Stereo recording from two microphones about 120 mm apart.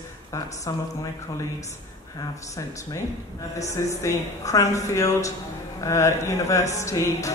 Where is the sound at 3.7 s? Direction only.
25° left (ahead or behind).